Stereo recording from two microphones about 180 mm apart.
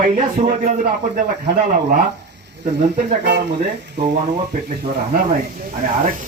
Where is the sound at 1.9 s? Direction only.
70° right (ahead or behind).